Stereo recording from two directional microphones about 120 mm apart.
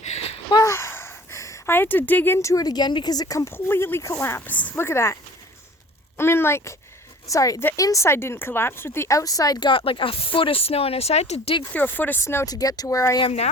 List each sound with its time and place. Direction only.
0.5 s speech: 25° left (ahead or behind)
6.1 s speech: 20° left (ahead or behind); by 11.5 s 60° left (ahead or behind)
11.7 s speech: 15° left (ahead or behind)
12.5 s speech: 30° left (ahead or behind)
13.2 s speech: 60° left (ahead or behind)